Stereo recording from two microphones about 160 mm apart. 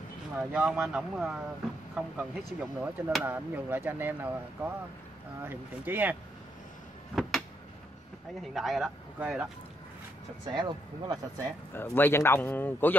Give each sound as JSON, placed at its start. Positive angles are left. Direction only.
{"t": 0.4, "sound": "speech", "side_deg": -5}
{"t": 7.2, "sound": "a sound", "side_deg": 0}
{"t": 8.4, "sound": "speech", "side_deg": 0}
{"t": 10.5, "sound": "speech", "side_deg": -25}
{"t": 11.7, "sound": "a man's voice", "side_deg": 15}